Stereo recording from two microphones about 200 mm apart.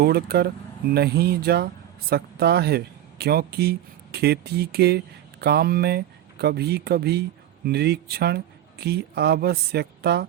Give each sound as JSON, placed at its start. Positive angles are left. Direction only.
{"t": 0.0, "sound": "a woman's voice", "side_deg": -50}